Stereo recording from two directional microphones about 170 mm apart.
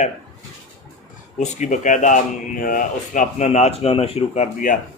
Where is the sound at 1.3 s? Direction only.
45° left (ahead or behind).